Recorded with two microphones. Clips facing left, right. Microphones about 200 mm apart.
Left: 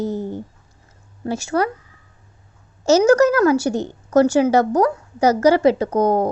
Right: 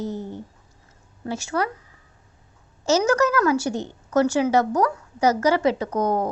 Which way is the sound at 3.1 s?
35° left (ahead or behind).